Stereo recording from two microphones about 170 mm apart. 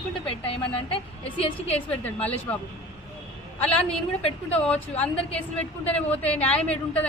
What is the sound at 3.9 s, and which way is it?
Speech, 35° left (ahead or behind).